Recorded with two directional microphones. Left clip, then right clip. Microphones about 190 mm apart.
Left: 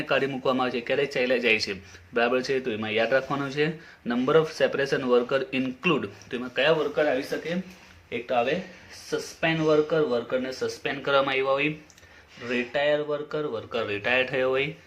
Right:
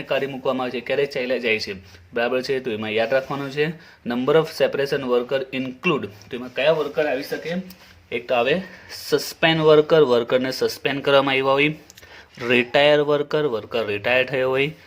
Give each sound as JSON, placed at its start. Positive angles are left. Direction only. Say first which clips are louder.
{"t": 0.1, "sound": "a man's voice", "louder": "right 2 dB", "side_deg": -20}
{"t": 8.1, "sound": "speech", "louder": "right 5 dB", "side_deg": -55}